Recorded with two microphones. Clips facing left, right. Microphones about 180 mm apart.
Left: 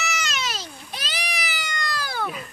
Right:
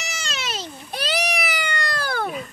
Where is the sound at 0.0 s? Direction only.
30° right (ahead or behind).